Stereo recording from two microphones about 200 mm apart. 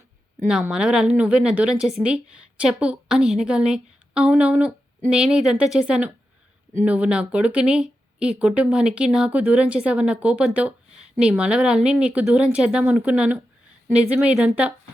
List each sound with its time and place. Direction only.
0.4 s speech: 5° right (ahead or behind)